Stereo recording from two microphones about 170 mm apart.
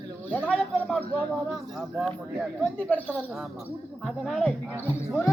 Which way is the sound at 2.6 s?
10° left (ahead or behind).